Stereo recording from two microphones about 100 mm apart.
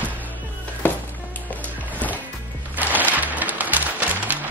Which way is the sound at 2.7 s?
15° right (ahead or behind).